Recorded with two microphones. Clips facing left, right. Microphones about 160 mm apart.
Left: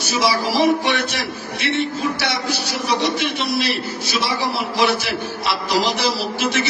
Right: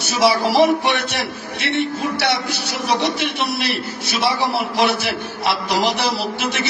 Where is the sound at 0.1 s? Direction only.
60° right (ahead or behind).